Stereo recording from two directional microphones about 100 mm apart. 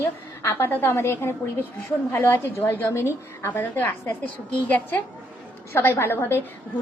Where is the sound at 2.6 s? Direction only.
20° left (ahead or behind).